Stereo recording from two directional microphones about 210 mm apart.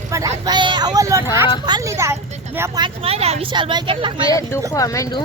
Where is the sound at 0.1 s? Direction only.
15° right (ahead or behind).